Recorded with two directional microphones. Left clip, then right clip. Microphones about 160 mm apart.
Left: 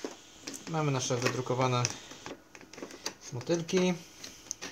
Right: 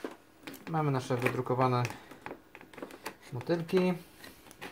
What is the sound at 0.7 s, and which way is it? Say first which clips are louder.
Speech: even; 20° right (ahead or behind).